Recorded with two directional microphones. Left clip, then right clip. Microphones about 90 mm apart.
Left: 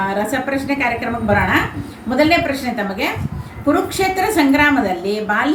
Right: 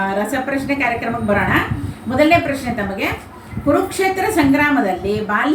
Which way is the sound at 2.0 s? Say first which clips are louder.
Right 1 dB; 35° left (ahead or behind).